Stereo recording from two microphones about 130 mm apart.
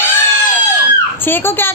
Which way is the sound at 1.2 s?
15° left (ahead or behind).